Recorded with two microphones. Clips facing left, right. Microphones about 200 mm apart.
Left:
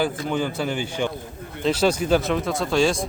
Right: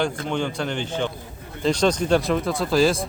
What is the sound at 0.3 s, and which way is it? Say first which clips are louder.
Speech: left 1 dB; 5° left (ahead or behind).